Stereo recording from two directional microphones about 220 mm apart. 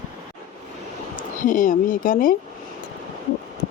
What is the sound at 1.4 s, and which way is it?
Speech, 35° left (ahead or behind).